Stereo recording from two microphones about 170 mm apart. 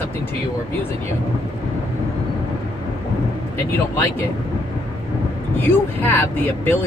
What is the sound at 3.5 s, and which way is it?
Speech, 15° left (ahead or behind).